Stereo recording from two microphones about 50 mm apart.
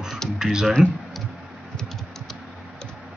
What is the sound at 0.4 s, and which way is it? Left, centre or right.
Speech, centre.